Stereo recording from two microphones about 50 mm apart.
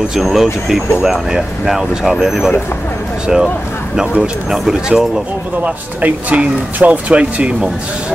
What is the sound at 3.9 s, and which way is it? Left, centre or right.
Speech, centre.